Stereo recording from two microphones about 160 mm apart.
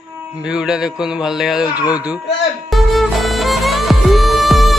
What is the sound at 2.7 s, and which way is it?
Music, centre (ahead or behind).